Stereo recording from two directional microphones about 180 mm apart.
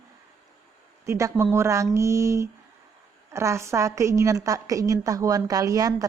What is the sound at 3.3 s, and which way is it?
A woman's voice, 15° right (ahead or behind).